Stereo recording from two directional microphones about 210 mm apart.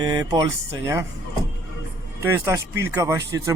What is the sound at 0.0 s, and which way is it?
Speech, 20° right (ahead or behind).